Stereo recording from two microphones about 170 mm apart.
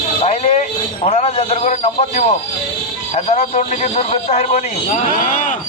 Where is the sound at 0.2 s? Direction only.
40° left (ahead or behind).